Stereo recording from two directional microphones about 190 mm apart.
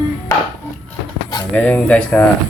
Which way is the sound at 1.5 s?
10° left (ahead or behind).